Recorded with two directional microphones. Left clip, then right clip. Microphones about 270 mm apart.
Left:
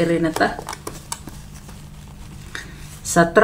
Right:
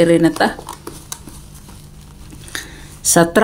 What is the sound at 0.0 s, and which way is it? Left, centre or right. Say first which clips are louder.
Speech: right 7 dB; right.